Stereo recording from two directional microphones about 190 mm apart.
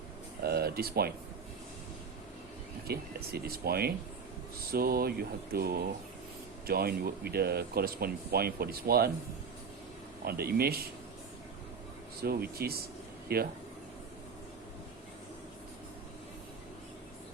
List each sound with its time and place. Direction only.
0.4 s speech: 55° right (ahead or behind)
2.8 s speech: 55° right (ahead or behind)
10.2 s speech: 55° right (ahead or behind)
12.2 s speech: 55° right (ahead or behind)